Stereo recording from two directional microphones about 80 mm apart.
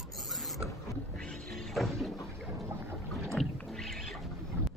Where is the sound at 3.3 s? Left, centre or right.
Centre.